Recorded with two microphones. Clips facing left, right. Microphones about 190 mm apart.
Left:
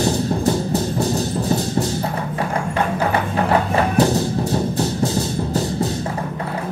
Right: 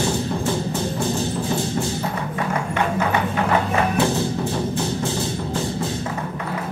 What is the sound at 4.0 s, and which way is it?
Music, 40° left (ahead or behind).